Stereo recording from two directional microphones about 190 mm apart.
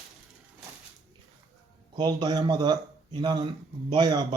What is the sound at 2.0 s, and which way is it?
Speech, 20° right (ahead or behind).